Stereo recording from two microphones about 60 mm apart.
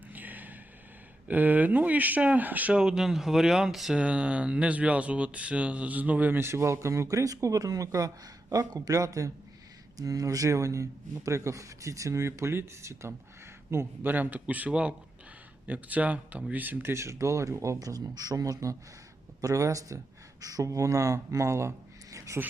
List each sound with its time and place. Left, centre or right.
0.1 s vehicle: right
1.3 s speech: right
2.7 s speech: centre
3.9 s speech: centre
6.4 s speech: right
13.7 s speech: right
16.9 s speech: right